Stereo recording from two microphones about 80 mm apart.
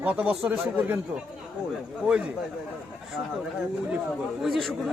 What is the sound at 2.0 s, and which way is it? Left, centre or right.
Speech, centre.